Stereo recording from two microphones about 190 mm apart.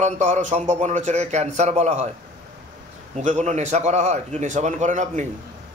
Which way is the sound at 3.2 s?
40° right (ahead or behind).